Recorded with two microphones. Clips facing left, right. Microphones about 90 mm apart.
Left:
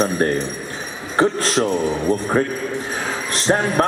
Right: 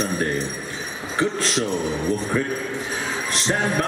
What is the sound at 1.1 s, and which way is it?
A man's voice, 45° left (ahead or behind).